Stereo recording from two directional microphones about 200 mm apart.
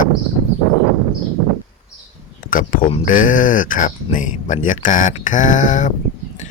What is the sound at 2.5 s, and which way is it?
Speech, 45° left (ahead or behind).